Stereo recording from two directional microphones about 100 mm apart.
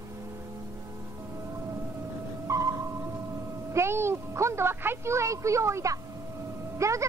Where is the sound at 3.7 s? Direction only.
25° right (ahead or behind).